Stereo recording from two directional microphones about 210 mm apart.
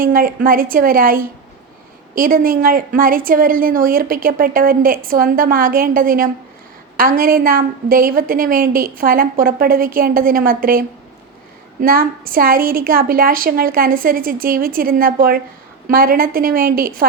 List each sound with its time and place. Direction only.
0.0 s a woman's voice: 40° right (ahead or behind)